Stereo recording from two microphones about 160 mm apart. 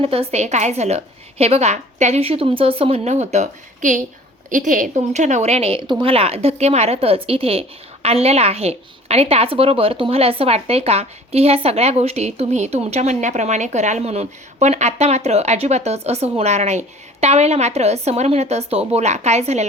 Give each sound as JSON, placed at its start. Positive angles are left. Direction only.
{"t": 0.0, "sound": "a woman's voice", "side_deg": -35}